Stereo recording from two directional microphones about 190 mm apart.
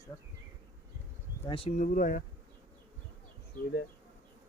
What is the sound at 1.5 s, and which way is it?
Speech, 30° left (ahead or behind).